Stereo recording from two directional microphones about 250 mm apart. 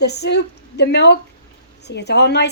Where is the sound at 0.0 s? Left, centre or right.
Left.